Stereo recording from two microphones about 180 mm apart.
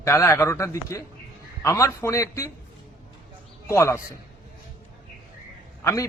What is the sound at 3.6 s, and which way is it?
Speech, 15° left (ahead or behind).